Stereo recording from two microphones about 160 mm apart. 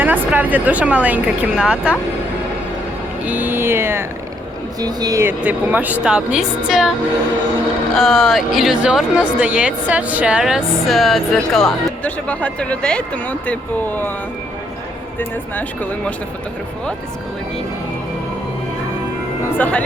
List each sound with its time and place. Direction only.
0.0 s speech: 10° right (ahead or behind)
3.2 s speech: 10° right (ahead or behind)
5.4 s speech: 10° right (ahead or behind)
7.9 s a woman's voice: centre (ahead or behind)
15.2 s speech: 10° left (ahead or behind)
19.5 s speech: 10° left (ahead or behind)